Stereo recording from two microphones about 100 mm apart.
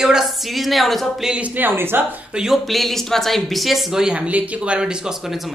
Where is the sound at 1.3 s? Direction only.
15° right (ahead or behind).